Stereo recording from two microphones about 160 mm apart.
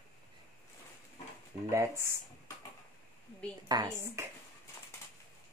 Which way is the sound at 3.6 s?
20° right (ahead or behind).